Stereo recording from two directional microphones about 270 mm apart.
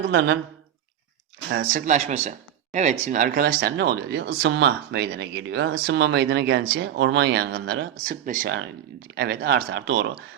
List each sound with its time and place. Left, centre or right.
0.1 s speech: right
1.5 s speech: right